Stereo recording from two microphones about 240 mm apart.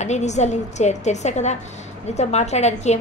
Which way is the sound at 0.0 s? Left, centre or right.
Left.